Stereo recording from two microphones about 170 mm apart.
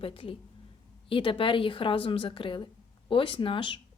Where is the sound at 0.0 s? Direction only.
30° left (ahead or behind).